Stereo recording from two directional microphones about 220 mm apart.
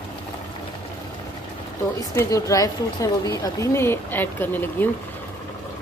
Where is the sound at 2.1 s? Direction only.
15° left (ahead or behind).